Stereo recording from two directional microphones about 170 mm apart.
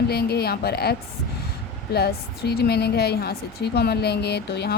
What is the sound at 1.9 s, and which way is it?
Speech, 70° left (ahead or behind).